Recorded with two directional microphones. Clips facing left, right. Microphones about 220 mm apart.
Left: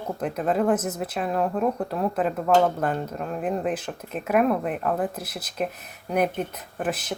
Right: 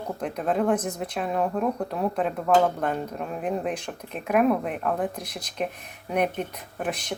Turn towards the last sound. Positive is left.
turn(degrees=5)  # may be behind; listen again after turning